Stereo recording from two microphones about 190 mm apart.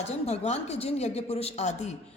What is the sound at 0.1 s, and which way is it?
A woman's voice, 35° left (ahead or behind).